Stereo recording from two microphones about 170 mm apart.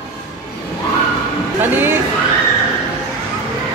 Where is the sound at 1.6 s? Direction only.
10° right (ahead or behind).